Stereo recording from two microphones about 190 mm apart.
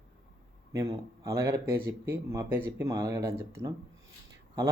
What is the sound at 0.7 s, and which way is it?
Speech, 15° right (ahead or behind).